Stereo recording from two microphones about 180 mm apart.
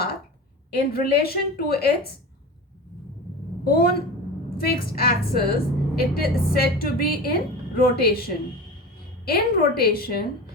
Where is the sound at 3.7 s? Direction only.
55° left (ahead or behind).